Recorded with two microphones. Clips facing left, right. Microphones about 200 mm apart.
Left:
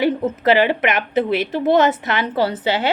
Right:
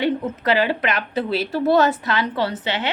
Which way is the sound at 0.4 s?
25° left (ahead or behind).